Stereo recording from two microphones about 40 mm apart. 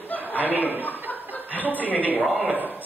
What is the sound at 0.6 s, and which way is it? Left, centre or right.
Speech, right.